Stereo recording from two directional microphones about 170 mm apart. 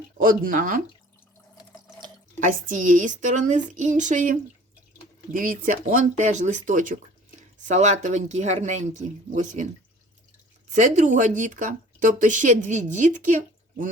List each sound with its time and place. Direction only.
0.2 s speech: 50° right (ahead or behind)
2.4 s speech: 50° right (ahead or behind)
10.7 s speech: 45° right (ahead or behind)